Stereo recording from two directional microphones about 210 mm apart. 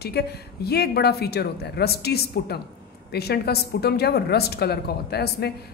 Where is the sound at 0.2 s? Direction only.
50° left (ahead or behind).